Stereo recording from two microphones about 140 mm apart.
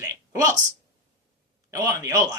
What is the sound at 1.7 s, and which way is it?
Speech, 25° right (ahead or behind).